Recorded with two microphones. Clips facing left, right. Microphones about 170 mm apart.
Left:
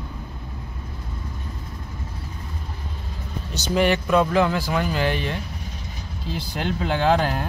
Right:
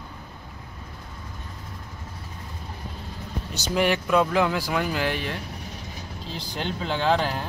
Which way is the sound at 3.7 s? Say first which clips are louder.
Left 3 dB; 10° right (ahead or behind).